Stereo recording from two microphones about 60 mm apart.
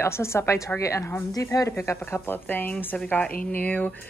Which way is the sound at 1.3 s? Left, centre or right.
Left.